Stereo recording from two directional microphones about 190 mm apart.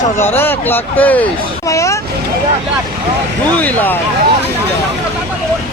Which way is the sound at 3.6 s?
10° left (ahead or behind).